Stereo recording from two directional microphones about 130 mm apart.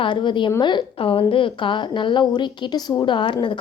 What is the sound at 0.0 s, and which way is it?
A woman's voice, 35° left (ahead or behind).